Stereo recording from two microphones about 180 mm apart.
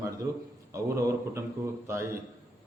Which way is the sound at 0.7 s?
15° right (ahead or behind).